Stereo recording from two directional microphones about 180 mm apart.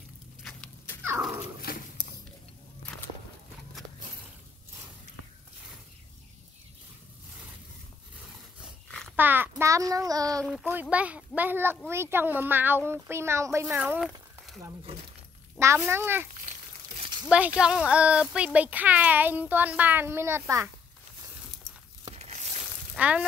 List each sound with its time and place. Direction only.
0.4 s chicken: centre (ahead or behind)
1.0 s dog: 15° right (ahead or behind)
1.6 s a sound: 55° left (ahead or behind)
9.1 s child singing: 10° right (ahead or behind)
10.4 s a child's voice: 5° right (ahead or behind)
15.6 s a child's voice: 15° right (ahead or behind)
17.0 s a sound: 25° right (ahead or behind)
17.3 s a child's voice: 5° right (ahead or behind)
22.1 s tearing: 35° right (ahead or behind)
22.9 s speech: 10° right (ahead or behind)